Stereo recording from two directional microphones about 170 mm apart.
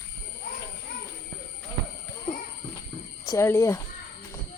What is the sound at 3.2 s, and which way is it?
Speech, 15° left (ahead or behind).